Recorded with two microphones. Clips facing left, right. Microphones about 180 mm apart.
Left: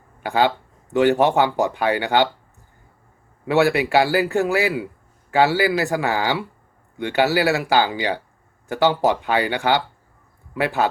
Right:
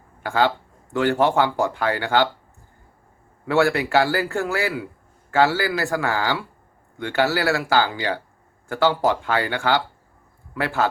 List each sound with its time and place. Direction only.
0.2 s speech: 20° left (ahead or behind)
3.4 s speech: 20° left (ahead or behind)